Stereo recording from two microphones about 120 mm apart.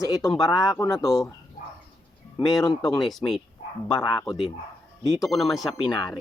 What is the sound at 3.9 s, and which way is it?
Speech, 25° left (ahead or behind).